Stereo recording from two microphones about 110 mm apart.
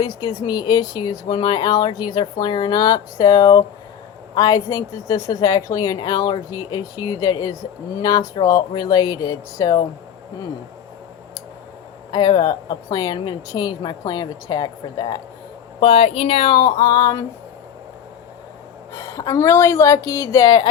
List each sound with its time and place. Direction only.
0.0 s speech: 40° left (ahead or behind)
12.1 s speech: 40° left (ahead or behind)
15.8 s speech: 55° left (ahead or behind); by 17.2 s 40° left (ahead or behind)
18.9 s speech: 35° left (ahead or behind)